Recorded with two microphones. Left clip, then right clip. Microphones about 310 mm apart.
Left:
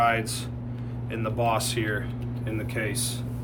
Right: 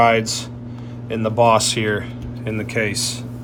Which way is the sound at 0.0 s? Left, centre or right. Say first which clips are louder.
Right 8 dB; right.